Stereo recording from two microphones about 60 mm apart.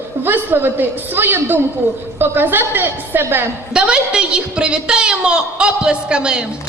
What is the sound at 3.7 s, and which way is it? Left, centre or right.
A woman's voice, centre.